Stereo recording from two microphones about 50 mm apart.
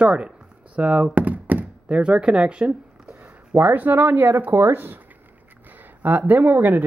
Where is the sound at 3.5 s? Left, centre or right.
Right.